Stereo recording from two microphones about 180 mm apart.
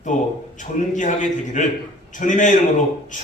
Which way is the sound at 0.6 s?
45° left (ahead or behind).